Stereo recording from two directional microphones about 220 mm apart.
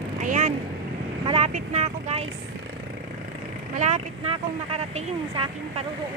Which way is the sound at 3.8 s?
30° right (ahead or behind).